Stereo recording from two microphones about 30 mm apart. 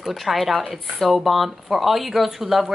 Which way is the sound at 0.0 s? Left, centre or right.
Centre.